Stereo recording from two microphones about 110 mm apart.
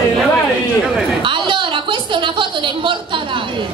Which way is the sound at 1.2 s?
50° right (ahead or behind).